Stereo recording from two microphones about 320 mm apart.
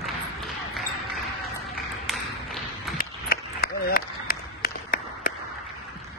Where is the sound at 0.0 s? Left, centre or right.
Centre.